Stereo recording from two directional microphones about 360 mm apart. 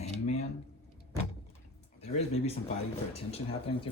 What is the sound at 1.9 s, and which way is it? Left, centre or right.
Speech, centre.